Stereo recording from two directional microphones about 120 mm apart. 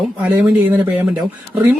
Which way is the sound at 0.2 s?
15° right (ahead or behind).